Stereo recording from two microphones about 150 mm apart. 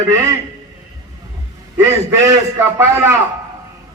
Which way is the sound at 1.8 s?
20° right (ahead or behind).